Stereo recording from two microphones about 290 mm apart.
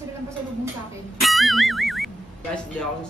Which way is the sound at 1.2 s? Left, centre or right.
Centre.